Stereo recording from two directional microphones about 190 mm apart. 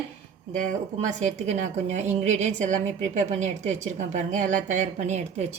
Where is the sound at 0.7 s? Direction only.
40° right (ahead or behind).